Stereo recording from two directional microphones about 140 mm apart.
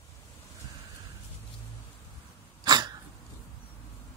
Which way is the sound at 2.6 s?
30° right (ahead or behind).